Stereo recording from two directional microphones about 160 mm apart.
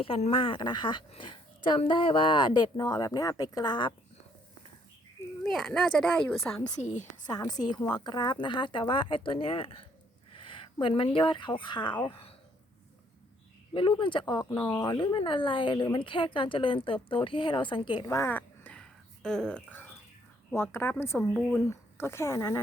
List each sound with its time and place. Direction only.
0.0 s speech: 35° left (ahead or behind)
5.4 s speech: 5° left (ahead or behind)
6.7 s a woman's voice: 50° left (ahead or behind)
7.3 s speech: 25° left (ahead or behind)
13.7 s speech: 30° left (ahead or behind)
14.6 s a woman's voice: 10° left (ahead or behind)
14.8 s a woman's voice: 30° left (ahead or behind)